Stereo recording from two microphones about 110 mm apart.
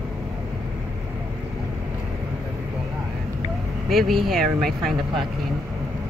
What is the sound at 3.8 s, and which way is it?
Speech, centre (ahead or behind).